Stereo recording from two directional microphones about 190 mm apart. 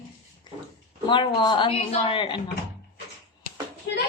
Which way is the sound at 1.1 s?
25° left (ahead or behind).